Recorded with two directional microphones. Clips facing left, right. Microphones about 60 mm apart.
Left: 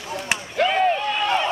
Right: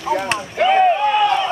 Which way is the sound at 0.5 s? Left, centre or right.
Centre.